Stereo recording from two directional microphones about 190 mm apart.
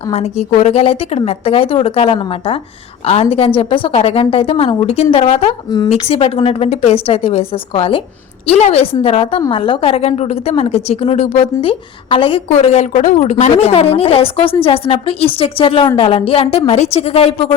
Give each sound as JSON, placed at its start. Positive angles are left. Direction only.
{"t": 0.1, "sound": "a woman's voice", "side_deg": 35}